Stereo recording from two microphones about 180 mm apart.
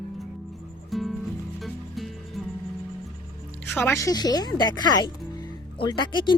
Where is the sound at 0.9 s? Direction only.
Centre (ahead or behind).